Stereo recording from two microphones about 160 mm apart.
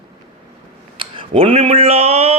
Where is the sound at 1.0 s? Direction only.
35° right (ahead or behind).